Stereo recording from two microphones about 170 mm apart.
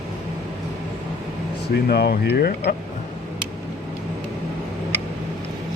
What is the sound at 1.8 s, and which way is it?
Speech, 70° left (ahead or behind).